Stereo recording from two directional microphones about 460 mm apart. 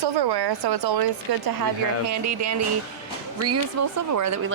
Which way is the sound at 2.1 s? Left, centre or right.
Right.